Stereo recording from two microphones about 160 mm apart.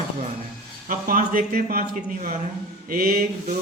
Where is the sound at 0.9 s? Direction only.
60° right (ahead or behind).